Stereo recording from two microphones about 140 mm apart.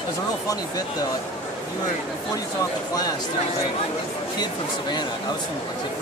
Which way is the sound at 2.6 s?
25° left (ahead or behind).